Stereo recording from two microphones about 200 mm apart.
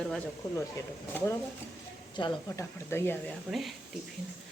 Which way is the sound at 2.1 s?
20° left (ahead or behind).